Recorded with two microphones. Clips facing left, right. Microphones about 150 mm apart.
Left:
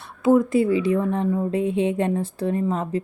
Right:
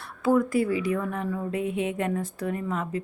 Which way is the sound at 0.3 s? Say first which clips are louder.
Left 5 dB; 20° left (ahead or behind).